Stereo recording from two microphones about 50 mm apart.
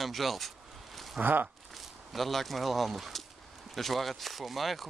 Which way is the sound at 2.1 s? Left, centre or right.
Centre.